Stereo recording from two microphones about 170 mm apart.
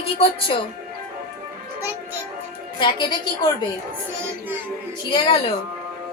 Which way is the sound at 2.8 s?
25° left (ahead or behind).